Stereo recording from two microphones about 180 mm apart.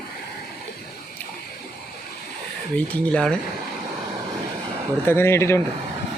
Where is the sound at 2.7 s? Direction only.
5° left (ahead or behind).